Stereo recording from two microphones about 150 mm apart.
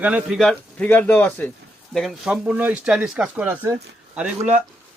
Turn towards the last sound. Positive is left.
turn(degrees=-10)  # may be behind; listen again after turning